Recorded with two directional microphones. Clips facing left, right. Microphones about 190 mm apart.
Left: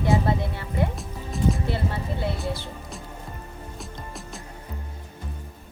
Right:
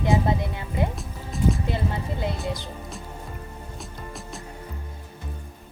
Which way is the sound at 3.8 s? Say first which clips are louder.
Even; centre (ahead or behind).